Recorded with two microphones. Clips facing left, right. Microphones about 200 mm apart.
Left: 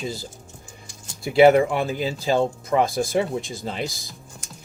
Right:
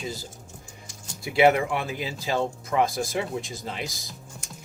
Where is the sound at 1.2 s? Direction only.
35° left (ahead or behind).